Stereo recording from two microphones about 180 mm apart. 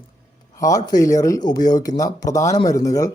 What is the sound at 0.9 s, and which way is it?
Speech, 20° left (ahead or behind).